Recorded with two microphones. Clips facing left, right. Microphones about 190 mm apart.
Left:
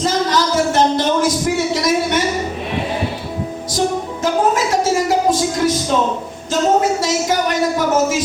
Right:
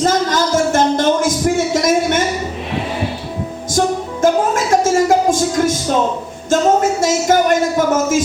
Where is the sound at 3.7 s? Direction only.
50° right (ahead or behind).